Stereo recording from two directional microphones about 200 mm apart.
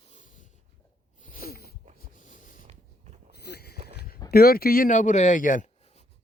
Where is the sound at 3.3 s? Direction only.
55° left (ahead or behind).